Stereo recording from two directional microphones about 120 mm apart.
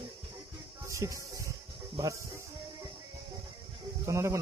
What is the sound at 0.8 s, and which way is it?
Music, 25° right (ahead or behind).